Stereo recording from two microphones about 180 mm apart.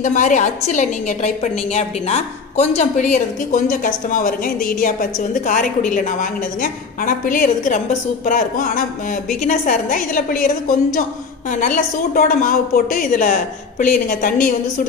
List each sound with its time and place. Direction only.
0.0 s a woman's voice: 45° left (ahead or behind)
11.5 s a woman's voice: 45° left (ahead or behind)